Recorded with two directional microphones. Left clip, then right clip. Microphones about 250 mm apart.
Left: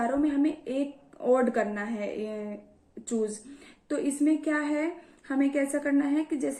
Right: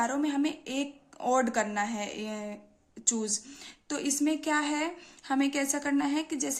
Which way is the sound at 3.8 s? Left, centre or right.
Right.